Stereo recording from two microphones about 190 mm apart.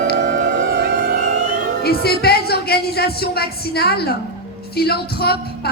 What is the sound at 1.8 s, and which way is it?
A woman's voice, 55° left (ahead or behind).